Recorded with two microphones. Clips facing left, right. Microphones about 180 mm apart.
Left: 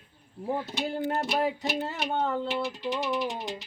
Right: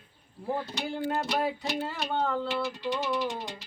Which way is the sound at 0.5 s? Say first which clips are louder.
Left 2 dB; 20° left (ahead or behind).